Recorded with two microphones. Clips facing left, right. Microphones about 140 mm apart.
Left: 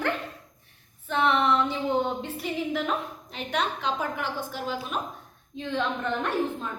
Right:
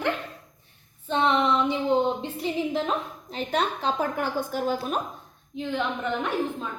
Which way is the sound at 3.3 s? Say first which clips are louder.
Right 3 dB; 35° right (ahead or behind).